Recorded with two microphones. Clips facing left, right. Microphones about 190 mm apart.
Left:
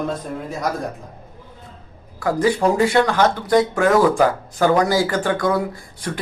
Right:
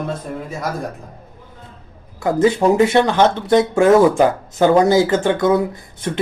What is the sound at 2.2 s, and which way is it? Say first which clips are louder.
Speech: right 3 dB; 25° right (ahead or behind).